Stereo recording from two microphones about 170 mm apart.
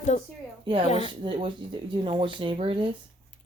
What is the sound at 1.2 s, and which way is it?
Speech, 30° right (ahead or behind).